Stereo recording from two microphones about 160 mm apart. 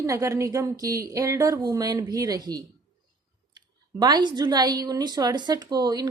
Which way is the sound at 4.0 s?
25° right (ahead or behind).